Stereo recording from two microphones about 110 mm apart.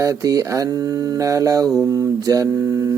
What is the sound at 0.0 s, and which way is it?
Mantra, 30° right (ahead or behind).